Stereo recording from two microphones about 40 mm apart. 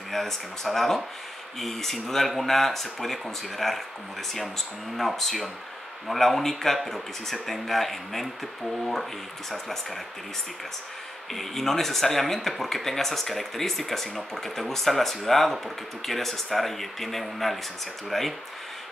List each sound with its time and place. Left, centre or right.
0.1 s speech: centre
4.9 s speech: centre
9.5 s speech: centre
11.3 s speech: centre